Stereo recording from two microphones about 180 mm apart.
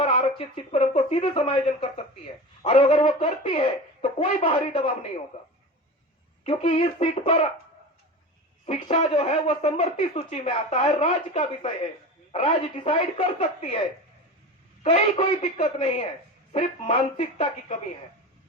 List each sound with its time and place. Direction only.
0.0 s speech: 35° left (ahead or behind)
6.4 s speech: 30° left (ahead or behind)
8.6 s speech: 35° left (ahead or behind)
14.8 s speech: 35° left (ahead or behind)